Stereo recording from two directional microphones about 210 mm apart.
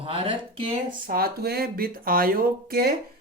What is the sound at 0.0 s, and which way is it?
Speech, 25° right (ahead or behind).